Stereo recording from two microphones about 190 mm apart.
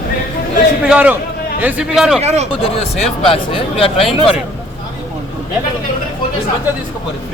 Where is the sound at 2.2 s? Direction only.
35° right (ahead or behind).